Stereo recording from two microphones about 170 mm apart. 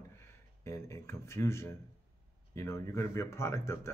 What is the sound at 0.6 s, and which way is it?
Speech, 15° left (ahead or behind).